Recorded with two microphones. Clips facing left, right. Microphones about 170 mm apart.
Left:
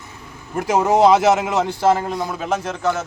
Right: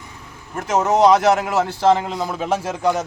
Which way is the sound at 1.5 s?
15° left (ahead or behind).